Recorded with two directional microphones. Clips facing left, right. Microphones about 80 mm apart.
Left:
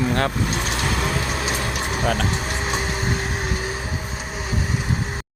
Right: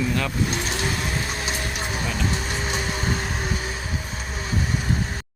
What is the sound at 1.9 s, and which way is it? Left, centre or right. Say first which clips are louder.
Vehicle: left 9 dB; left.